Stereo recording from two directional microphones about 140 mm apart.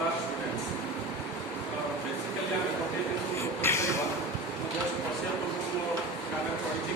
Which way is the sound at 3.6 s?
20° left (ahead or behind).